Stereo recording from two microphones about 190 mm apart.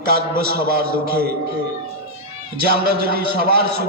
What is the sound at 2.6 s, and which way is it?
A man's voice, 55° right (ahead or behind).